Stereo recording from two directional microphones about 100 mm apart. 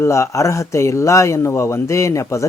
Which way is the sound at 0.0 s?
30° left (ahead or behind).